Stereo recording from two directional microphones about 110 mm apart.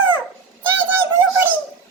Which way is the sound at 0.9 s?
20° right (ahead or behind).